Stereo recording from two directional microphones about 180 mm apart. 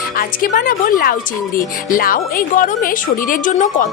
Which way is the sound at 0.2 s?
50° left (ahead or behind).